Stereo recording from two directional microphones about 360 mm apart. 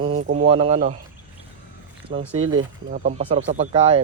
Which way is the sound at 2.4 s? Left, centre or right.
Right.